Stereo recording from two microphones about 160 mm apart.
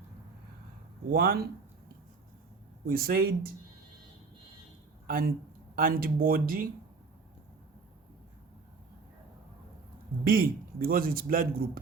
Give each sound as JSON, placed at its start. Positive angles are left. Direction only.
{"t": 1.1, "sound": "speech", "side_deg": -70}
{"t": 2.8, "sound": "speech", "side_deg": -70}
{"t": 5.0, "sound": "a man's voice", "side_deg": -65}
{"t": 10.2, "sound": "a man's voice", "side_deg": -65}